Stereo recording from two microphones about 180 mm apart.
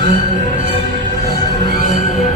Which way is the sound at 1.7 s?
45° left (ahead or behind).